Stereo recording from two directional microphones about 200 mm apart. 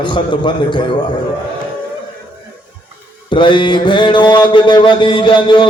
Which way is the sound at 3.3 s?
25° left (ahead or behind).